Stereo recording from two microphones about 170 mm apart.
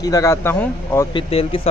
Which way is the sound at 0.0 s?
20° left (ahead or behind).